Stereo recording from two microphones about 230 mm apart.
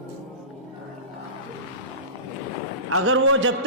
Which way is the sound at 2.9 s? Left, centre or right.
Right.